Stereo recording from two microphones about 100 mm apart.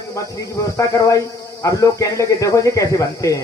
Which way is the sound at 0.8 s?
35° left (ahead or behind).